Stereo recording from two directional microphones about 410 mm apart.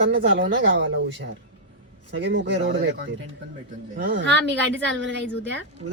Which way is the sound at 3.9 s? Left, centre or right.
Right.